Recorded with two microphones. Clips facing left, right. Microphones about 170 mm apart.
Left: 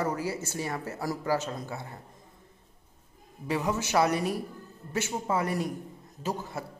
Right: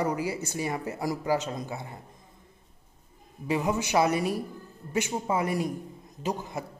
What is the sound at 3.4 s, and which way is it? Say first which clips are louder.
A man's voice: right 2 dB; 15° right (ahead or behind).